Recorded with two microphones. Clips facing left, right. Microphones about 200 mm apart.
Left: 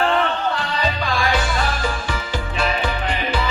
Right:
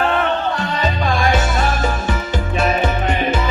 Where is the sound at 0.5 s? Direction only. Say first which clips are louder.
Right 3 dB; 45° right (ahead or behind).